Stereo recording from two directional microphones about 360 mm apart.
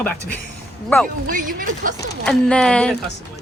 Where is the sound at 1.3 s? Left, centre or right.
Right.